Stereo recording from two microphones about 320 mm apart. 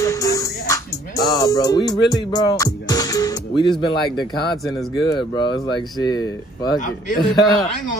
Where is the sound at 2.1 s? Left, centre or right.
Centre.